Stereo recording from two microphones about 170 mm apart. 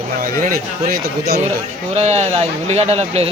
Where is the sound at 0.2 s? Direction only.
55° right (ahead or behind).